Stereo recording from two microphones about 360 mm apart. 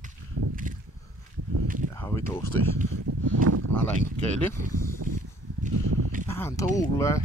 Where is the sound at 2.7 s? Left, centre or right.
Right.